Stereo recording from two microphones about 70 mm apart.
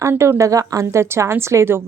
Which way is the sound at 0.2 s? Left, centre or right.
Right.